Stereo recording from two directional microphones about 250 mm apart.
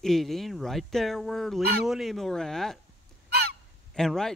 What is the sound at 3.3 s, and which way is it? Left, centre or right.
Fowl, right.